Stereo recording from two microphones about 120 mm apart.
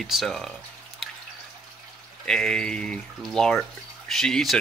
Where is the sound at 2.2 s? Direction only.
5° left (ahead or behind).